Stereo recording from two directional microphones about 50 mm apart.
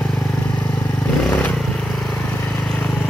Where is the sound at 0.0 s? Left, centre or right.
Centre.